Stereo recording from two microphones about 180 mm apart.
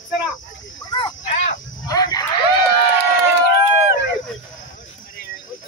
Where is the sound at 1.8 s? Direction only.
20° left (ahead or behind).